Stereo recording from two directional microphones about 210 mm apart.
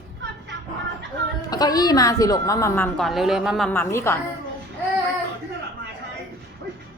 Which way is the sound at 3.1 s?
Centre (ahead or behind).